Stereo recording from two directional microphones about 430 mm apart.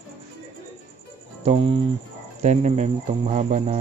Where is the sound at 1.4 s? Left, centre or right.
Centre.